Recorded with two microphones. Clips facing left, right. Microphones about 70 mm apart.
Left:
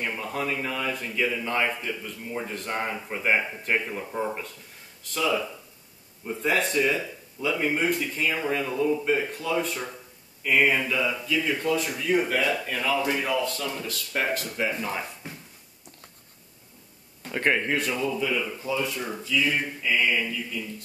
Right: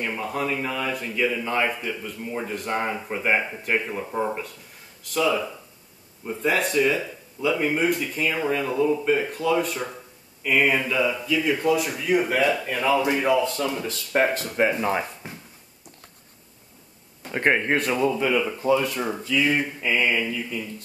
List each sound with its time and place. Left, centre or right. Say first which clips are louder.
0.2 s a man's voice: right 3 dB; centre; by 14.6 s right
14.8 s speech: right 7 dB; right
17.3 s a man's voice: right 3 dB; right
17.7 s mantra: right 5 dB; right
18.6 s speech: right 7 dB; right
19.3 s mantra: right 3 dB; right